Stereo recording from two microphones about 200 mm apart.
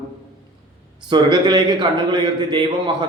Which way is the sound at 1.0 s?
20° right (ahead or behind).